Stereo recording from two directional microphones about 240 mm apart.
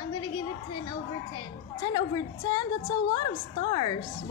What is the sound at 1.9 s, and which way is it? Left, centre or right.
A woman's voice, centre.